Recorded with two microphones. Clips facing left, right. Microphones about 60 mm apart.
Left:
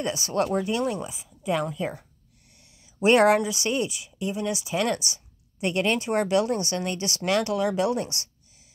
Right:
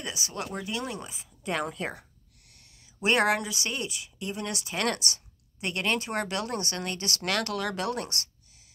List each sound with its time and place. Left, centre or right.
0.0 s speech: left
0.6 s speech: left
1.4 s a woman's voice: centre
3.0 s speech: left
5.7 s speech: left